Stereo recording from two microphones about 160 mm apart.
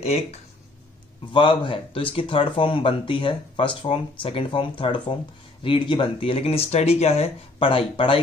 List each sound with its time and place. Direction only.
0.0 s speech: 45° left (ahead or behind)
1.3 s speech: 30° left (ahead or behind)